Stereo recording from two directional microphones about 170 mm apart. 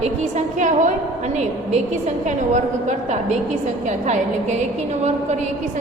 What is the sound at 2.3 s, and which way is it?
A woman's voice, 45° right (ahead or behind).